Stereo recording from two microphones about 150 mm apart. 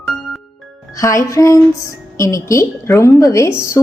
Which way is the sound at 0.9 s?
20° left (ahead or behind).